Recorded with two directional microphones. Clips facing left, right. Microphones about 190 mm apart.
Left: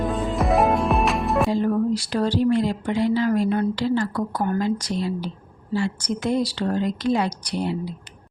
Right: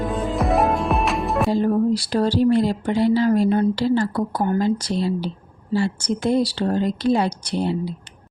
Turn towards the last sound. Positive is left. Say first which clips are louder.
# right 3 dB
turn(degrees=-30)  # may be behind; listen again after turning